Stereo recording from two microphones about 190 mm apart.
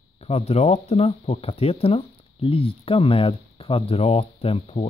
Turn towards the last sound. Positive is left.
turn(degrees=35)  # may be behind; listen again after turning